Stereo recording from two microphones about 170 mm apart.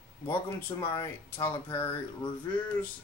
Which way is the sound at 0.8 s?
15° left (ahead or behind).